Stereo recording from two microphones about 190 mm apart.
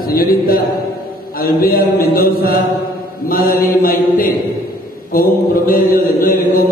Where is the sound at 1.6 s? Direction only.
50° left (ahead or behind).